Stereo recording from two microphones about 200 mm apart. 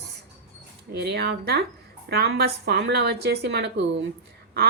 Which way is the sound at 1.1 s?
55° right (ahead or behind).